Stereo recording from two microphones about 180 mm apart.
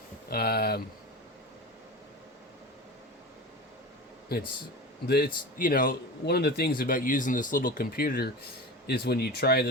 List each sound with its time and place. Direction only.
0.3 s speech: 60° left (ahead or behind)
4.3 s a man's voice: 60° left (ahead or behind)